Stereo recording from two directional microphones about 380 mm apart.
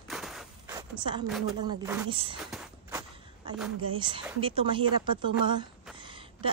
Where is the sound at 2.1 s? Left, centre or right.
Centre.